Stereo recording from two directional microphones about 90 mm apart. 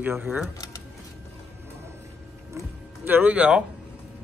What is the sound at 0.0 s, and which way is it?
Speech, 20° right (ahead or behind).